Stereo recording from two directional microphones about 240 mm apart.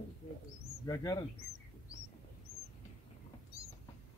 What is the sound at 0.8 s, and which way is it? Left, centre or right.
Speech, centre.